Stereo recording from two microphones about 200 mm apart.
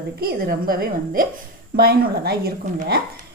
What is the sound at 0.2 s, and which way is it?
A woman's voice, 50° right (ahead or behind).